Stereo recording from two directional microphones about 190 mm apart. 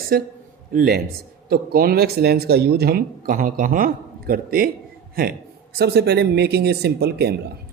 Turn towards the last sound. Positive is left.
turn(degrees=-60)  # may be behind; listen again after turning